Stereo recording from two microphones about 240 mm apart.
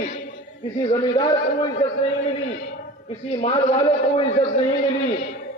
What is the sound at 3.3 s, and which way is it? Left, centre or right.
A man's voice, left.